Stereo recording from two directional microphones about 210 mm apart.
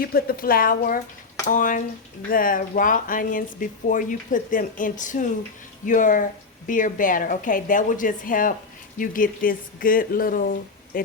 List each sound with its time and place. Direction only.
0.0 s speech: 45° left (ahead or behind)